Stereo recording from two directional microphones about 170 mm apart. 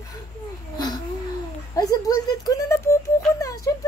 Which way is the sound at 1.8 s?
20° left (ahead or behind).